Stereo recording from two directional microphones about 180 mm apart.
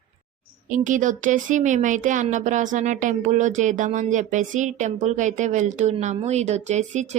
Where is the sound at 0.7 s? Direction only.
45° right (ahead or behind).